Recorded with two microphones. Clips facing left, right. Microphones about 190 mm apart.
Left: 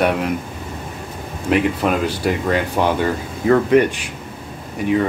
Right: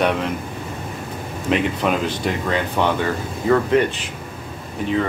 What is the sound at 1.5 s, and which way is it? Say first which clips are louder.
Speech: left 2 dB; 5° left (ahead or behind).